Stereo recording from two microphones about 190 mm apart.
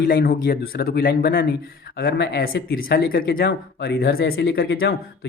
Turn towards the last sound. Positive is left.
turn(degrees=55)  # may be behind; listen again after turning